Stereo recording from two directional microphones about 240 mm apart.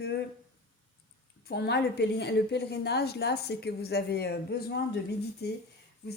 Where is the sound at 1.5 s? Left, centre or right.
Left.